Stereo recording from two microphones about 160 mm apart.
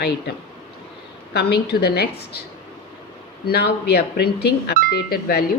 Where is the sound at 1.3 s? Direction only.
90° left.